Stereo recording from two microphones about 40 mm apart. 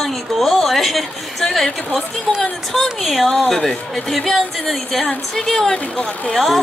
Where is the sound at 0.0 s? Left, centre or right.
Centre.